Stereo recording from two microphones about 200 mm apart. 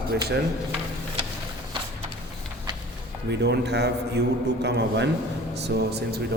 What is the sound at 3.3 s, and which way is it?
A man's voice, 55° right (ahead or behind).